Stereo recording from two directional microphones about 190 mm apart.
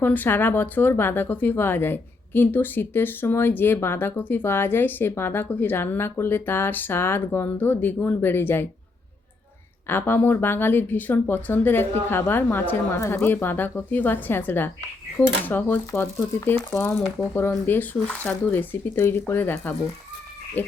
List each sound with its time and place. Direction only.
0.0 s speech: 10° left (ahead or behind)
9.8 s speech: 10° left (ahead or behind)